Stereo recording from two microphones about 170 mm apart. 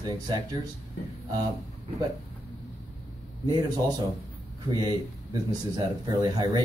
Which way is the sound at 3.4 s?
25° right (ahead or behind).